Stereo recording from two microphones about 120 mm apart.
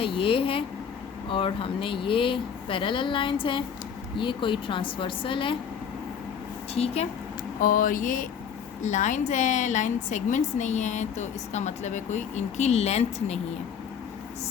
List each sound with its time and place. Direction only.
0.0 s speech: 45° left (ahead or behind)
6.7 s speech: 60° left (ahead or behind)
7.6 s a woman's voice: 90° left; by 13.4 s 65° left (ahead or behind)